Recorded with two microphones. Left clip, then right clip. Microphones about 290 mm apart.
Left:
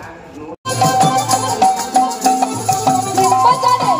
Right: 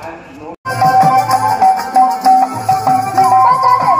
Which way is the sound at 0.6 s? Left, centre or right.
Centre.